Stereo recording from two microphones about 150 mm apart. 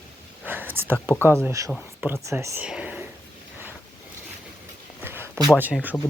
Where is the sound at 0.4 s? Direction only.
10° right (ahead or behind).